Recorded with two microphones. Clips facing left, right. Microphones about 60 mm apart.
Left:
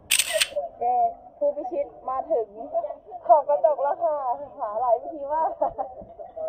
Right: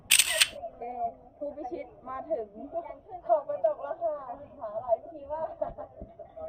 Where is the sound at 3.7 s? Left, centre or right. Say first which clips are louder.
Left 8 dB; left.